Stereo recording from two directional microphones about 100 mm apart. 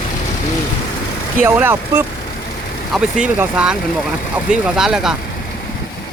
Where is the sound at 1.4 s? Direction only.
20° right (ahead or behind).